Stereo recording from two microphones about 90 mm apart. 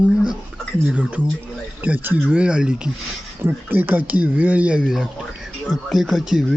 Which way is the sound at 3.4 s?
25° right (ahead or behind).